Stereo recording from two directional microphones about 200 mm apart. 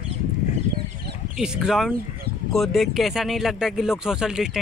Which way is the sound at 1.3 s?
5° right (ahead or behind).